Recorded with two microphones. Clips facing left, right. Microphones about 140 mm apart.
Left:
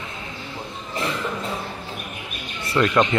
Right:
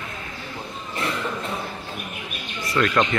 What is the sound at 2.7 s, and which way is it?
Speech, 20° left (ahead or behind).